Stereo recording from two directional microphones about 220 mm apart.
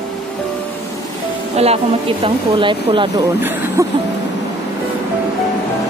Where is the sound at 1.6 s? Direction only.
30° right (ahead or behind).